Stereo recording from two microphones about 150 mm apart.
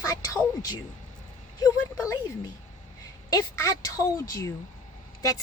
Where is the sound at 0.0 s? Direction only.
25° left (ahead or behind).